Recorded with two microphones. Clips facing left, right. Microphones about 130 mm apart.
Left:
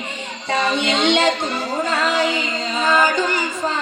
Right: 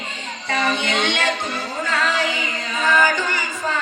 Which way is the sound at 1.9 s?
20° left (ahead or behind).